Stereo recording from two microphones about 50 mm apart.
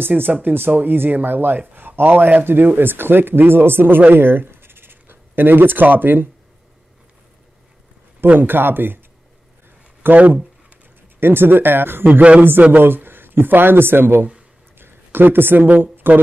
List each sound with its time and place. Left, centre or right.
0.1 s speech: right
8.2 s speech: right
10.0 s speech: right
11.1 s speech: right
12.1 s a man's voice: right
12.7 s a man's voice: right